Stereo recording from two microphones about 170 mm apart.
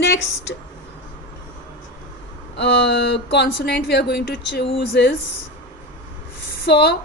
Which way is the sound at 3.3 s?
75° left (ahead or behind).